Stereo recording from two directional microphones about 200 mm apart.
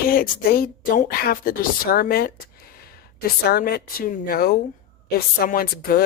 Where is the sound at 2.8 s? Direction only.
50° left (ahead or behind).